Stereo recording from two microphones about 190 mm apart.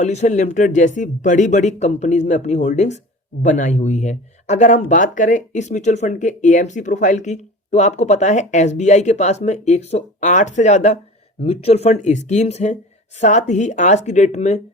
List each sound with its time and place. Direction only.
0.0 s speech: 35° left (ahead or behind)